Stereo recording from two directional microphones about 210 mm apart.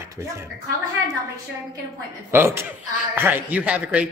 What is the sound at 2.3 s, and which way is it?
Speech, 10° right (ahead or behind).